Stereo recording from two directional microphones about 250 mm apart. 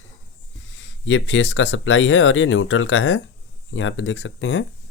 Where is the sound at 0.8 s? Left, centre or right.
Left.